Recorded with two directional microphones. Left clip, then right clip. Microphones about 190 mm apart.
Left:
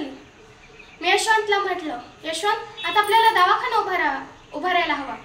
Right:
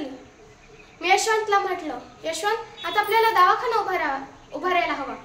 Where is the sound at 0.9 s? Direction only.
20° right (ahead or behind).